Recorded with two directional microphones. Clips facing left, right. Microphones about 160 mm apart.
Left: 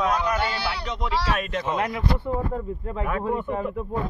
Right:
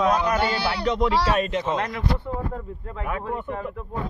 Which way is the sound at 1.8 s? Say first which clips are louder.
Left 1 dB; 10° left (ahead or behind).